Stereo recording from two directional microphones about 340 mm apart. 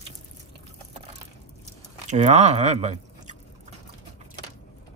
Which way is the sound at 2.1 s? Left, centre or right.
Centre.